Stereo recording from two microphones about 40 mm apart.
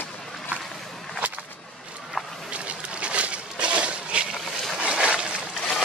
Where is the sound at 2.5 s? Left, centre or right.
Right.